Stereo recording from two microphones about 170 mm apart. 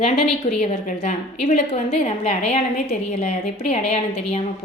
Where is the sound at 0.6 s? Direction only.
40° left (ahead or behind).